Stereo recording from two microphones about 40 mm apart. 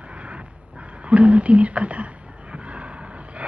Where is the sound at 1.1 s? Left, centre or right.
Right.